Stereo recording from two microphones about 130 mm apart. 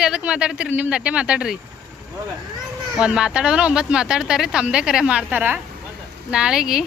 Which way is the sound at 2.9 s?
5° right (ahead or behind).